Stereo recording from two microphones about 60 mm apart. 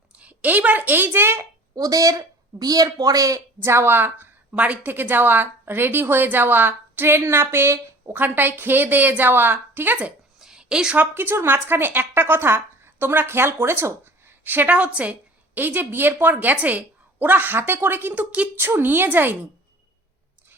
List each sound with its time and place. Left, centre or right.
0.1 s a woman's voice: right
1.7 s speech: right
3.6 s a woman's voice: right
4.5 s a woman's voice: right
4.9 s a woman's voice: right
8.1 s a woman's voice: right
10.4 s a sound: centre
10.9 s a woman's voice: right
14.8 s a woman's voice: right
15.5 s a woman's voice: right
18.1 s a woman's voice: right
18.5 s a woman's voice: right